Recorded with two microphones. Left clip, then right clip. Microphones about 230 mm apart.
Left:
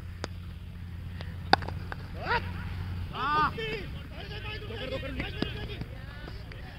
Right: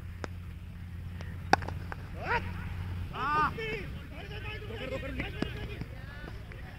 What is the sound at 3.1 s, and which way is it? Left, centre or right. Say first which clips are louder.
Vehicle: left 2 dB; centre.